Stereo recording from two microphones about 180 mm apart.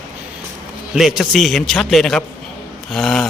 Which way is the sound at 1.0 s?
Centre (ahead or behind).